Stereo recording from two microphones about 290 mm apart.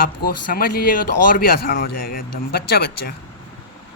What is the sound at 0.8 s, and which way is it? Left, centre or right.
Speech, left.